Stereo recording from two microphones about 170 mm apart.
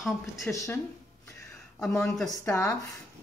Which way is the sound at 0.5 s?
15° left (ahead or behind).